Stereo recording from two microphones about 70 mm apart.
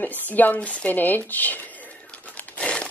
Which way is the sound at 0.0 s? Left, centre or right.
Left.